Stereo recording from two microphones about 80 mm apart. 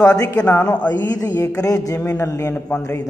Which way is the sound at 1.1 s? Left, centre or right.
Left.